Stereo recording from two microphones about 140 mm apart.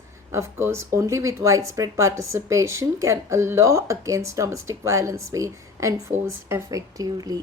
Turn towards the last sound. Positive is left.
turn(degrees=-25)  # may be behind; listen again after turning